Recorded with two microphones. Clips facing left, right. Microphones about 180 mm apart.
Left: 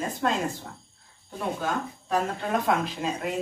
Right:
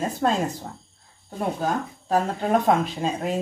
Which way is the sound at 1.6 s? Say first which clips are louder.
Right 4 dB; 35° right (ahead or behind).